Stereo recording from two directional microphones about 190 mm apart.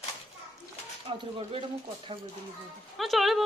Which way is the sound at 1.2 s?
30° right (ahead or behind).